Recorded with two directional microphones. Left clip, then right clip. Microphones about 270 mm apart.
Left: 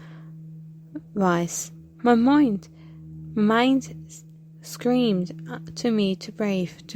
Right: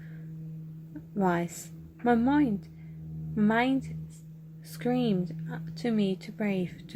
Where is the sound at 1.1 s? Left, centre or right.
Left.